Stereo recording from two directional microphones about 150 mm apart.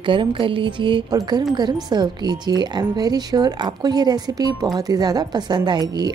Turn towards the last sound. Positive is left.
turn(degrees=-30)  # may be behind; listen again after turning